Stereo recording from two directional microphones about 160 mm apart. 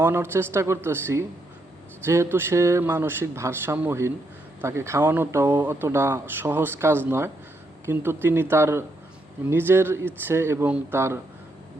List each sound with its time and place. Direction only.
0.0 s speech: 15° right (ahead or behind)